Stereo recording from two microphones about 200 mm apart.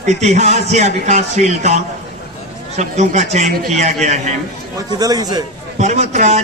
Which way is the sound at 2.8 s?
35° right (ahead or behind).